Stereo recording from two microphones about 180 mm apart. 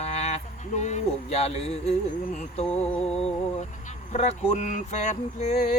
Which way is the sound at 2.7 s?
5° left (ahead or behind).